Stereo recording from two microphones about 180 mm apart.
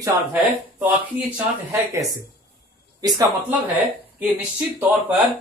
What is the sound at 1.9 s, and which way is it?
Speech, 20° right (ahead or behind).